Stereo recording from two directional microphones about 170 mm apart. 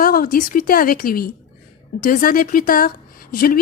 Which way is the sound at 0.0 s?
55° left (ahead or behind).